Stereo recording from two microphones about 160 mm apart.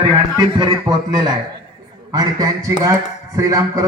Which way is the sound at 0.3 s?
25° right (ahead or behind).